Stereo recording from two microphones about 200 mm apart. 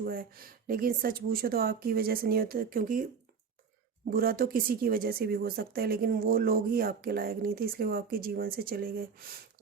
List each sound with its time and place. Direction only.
0.0 s speech: 45° right (ahead or behind)
4.1 s speech: 45° right (ahead or behind)